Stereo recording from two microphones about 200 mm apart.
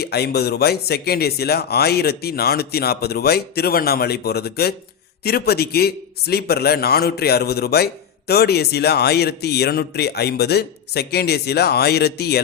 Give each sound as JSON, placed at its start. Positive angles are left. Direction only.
{"t": 0.0, "sound": "speech", "side_deg": 55}